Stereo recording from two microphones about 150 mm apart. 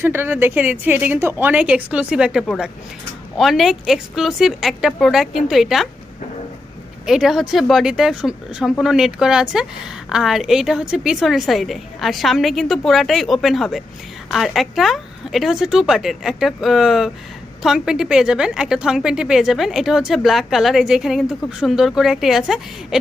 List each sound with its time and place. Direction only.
0.0 s a woman's voice: 15° right (ahead or behind)
7.0 s a woman's voice: 5° right (ahead or behind)